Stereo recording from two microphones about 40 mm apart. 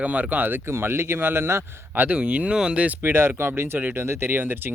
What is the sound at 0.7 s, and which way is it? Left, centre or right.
Speech, right.